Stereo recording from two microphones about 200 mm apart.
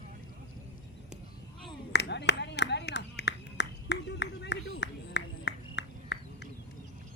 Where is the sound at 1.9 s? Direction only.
60° left (ahead or behind).